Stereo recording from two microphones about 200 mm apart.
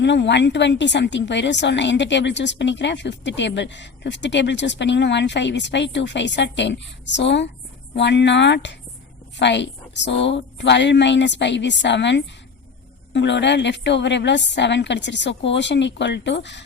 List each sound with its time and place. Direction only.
0.0 s a woman's voice: 60° left (ahead or behind)